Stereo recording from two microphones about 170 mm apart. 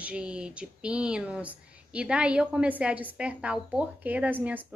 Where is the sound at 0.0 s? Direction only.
5° right (ahead or behind).